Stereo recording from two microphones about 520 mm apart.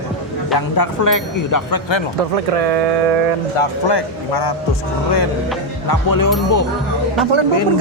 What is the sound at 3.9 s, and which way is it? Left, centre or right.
Speech, left.